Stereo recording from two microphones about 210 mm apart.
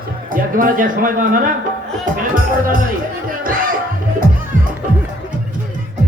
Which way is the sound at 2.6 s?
40° right (ahead or behind).